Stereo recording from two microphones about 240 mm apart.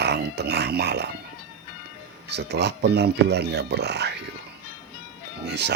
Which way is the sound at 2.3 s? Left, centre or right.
Right.